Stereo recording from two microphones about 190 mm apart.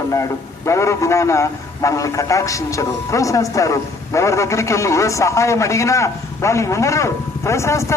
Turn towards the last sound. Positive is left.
turn(degrees=15)  # may be behind; listen again after turning